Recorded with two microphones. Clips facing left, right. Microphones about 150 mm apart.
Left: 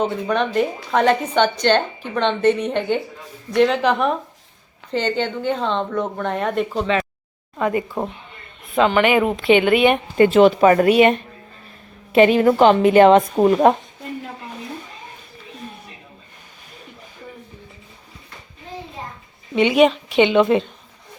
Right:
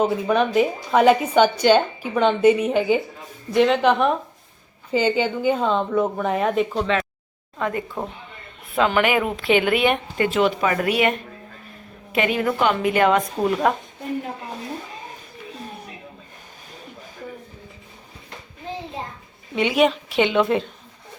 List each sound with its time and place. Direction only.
0.0 s a woman's voice: 5° right (ahead or behind)
10.2 s speech: 30° left (ahead or behind)
10.8 s a woman's voice: 25° left (ahead or behind)
12.1 s a woman's voice: 30° left (ahead or behind)
19.5 s a woman's voice: centre (ahead or behind)